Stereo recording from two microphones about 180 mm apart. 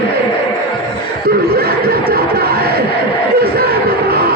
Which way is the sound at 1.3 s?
60° right (ahead or behind).